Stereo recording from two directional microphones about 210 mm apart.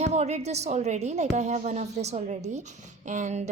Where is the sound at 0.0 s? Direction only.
30° right (ahead or behind).